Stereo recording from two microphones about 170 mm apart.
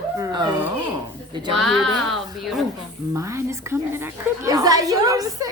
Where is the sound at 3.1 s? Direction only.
15° right (ahead or behind).